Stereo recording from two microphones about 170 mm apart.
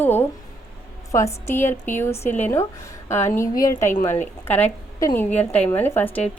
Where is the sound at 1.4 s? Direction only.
15° left (ahead or behind).